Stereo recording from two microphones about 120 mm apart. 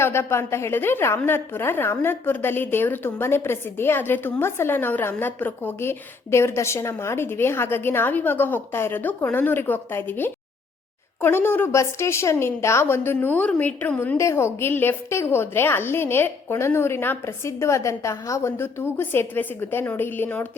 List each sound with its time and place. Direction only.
0.0 s a woman's voice: 20° left (ahead or behind)
14.2 s a woman's voice: 25° left (ahead or behind)